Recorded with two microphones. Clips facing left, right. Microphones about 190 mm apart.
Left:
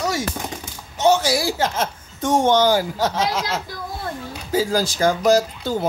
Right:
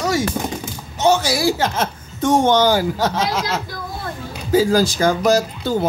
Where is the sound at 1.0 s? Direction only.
90° right.